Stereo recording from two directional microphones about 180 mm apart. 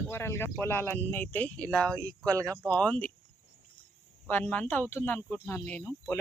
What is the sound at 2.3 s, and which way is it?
Speech, 15° right (ahead or behind).